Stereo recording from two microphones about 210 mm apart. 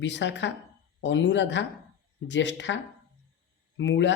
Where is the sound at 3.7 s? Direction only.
60° left (ahead or behind).